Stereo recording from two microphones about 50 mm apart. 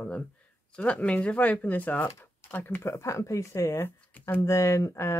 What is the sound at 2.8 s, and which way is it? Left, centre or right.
Speech, left.